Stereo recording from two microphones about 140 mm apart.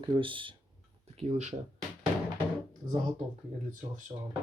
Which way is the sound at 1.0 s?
50° right (ahead or behind).